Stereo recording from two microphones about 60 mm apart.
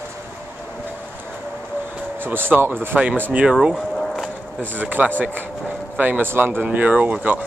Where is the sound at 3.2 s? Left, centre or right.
Right.